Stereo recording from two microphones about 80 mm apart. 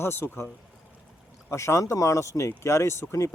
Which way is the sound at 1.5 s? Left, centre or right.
Left.